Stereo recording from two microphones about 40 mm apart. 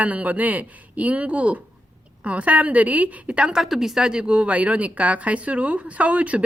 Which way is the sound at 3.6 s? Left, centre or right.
Centre.